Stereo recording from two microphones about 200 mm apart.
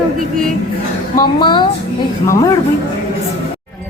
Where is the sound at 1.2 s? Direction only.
20° left (ahead or behind).